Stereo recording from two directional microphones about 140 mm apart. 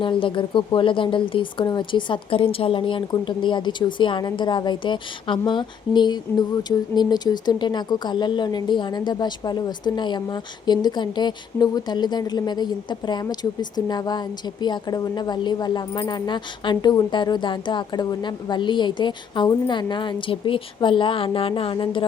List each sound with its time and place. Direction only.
0.0 s speech: 35° left (ahead or behind)